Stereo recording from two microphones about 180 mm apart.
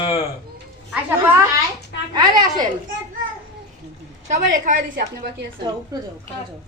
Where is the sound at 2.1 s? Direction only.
20° right (ahead or behind).